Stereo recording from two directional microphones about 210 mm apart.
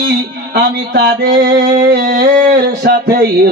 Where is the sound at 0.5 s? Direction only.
50° right (ahead or behind).